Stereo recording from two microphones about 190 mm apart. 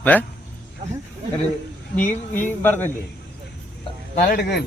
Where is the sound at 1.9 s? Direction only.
10° left (ahead or behind).